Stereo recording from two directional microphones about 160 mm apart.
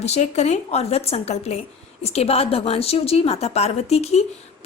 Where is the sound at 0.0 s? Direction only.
45° left (ahead or behind).